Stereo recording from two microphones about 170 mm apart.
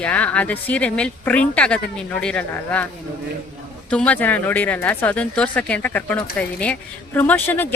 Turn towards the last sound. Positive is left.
turn(degrees=10)  # may be behind; listen again after turning